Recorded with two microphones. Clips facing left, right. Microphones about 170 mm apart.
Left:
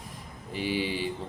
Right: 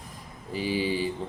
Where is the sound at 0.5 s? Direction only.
40° right (ahead or behind).